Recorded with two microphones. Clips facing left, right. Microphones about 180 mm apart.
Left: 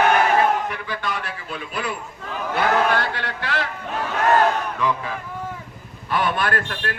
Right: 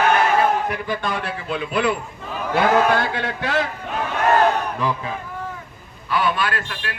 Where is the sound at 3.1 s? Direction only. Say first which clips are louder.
Right 4 dB; 50° right (ahead or behind).